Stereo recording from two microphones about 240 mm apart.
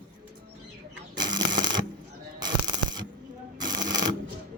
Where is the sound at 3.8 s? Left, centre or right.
Centre.